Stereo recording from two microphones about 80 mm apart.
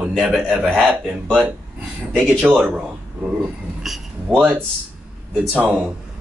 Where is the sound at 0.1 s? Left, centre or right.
Centre.